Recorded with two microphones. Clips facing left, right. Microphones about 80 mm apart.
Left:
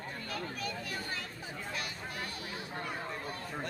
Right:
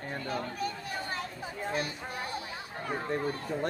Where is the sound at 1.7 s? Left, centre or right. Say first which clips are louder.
Right 7 dB; right.